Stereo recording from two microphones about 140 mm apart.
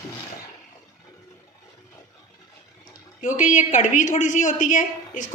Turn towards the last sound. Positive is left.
turn(degrees=70)  # may be behind; listen again after turning